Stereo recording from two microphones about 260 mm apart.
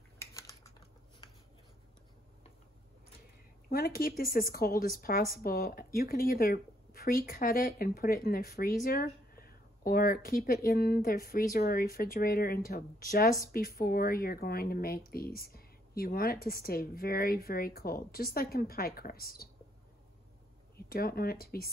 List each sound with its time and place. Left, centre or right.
0.2 s typing: centre
3.7 s speech: left
20.9 s speech: left